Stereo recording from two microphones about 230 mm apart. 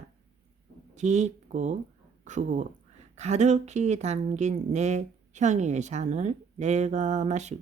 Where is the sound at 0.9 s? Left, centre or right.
Right.